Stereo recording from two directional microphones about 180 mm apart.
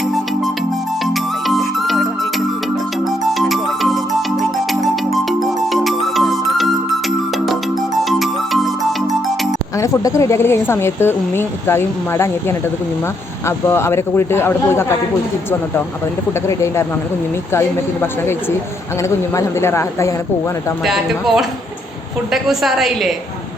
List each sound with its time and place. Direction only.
1.0 s music: centre (ahead or behind)
3.3 s music: centre (ahead or behind)
9.7 s a woman's voice: 15° left (ahead or behind)
13.7 s a woman's voice: 15° left (ahead or behind)
17.5 s a woman's voice: 15° left (ahead or behind)
20.8 s a woman's voice: centre (ahead or behind)